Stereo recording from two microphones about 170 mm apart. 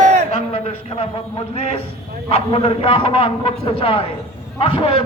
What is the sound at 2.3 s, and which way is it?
A man's voice, 35° left (ahead or behind).